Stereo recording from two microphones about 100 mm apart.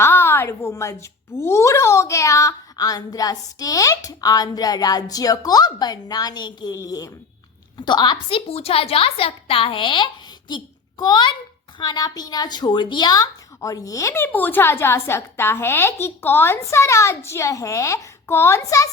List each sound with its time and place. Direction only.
0.0 s speech: 25° left (ahead or behind)
7.8 s a woman's voice: 45° left (ahead or behind)
8.3 s a woman's voice: 70° left (ahead or behind); by 18.9 s 35° left (ahead or behind)